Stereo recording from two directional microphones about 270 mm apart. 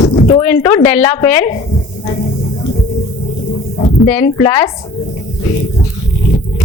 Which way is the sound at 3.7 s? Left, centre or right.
Left.